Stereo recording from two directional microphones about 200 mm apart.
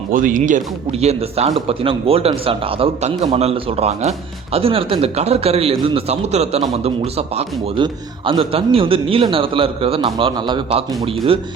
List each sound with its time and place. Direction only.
0.1 s speech: 40° right (ahead or behind)